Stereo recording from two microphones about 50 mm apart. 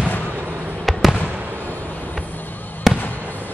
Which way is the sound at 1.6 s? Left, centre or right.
Left.